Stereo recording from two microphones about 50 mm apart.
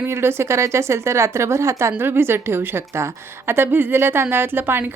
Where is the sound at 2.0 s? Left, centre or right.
Right.